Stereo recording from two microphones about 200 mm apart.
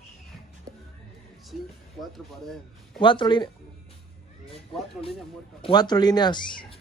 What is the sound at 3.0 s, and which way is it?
Speech, 25° left (ahead or behind).